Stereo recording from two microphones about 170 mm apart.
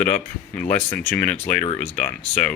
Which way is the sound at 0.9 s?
10° left (ahead or behind).